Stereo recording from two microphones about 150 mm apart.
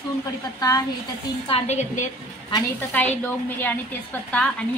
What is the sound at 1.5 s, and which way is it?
Speech, 50° left (ahead or behind).